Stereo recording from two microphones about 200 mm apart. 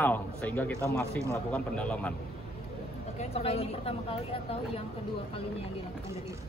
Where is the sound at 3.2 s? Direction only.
30° left (ahead or behind).